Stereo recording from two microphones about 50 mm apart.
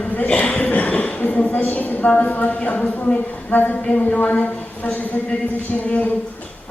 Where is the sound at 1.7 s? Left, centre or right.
Left.